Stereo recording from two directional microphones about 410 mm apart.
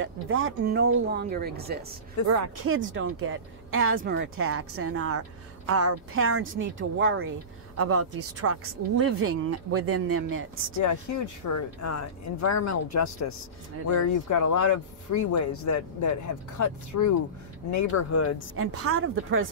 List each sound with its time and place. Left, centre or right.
0.0 s speech: right
10.8 s speech: left
18.6 s speech: right